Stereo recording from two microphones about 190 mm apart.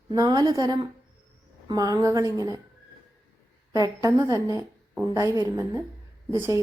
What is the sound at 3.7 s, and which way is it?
A woman's voice, 20° right (ahead or behind).